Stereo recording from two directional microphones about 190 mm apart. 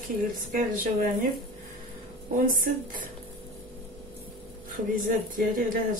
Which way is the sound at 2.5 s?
45° right (ahead or behind).